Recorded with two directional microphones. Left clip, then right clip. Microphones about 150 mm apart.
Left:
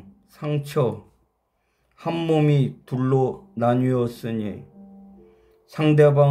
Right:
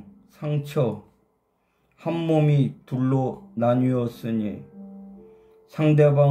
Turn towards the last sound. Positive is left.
turn(degrees=30)  # may be behind; listen again after turning